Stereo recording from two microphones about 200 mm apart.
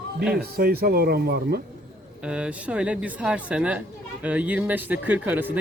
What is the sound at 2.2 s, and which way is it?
Speech, 5° right (ahead or behind).